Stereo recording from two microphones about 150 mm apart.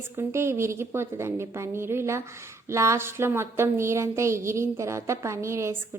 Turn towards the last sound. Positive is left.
turn(degrees=-20)  # may be behind; listen again after turning